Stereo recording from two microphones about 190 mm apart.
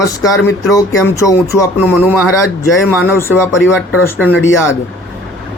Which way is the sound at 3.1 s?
10° left (ahead or behind).